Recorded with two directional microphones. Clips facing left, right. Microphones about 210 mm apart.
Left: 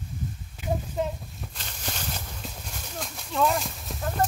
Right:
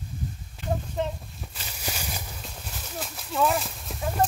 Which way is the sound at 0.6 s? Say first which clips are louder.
Even; 5° left (ahead or behind).